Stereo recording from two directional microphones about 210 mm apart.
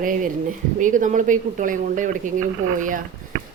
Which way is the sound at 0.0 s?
40° right (ahead or behind).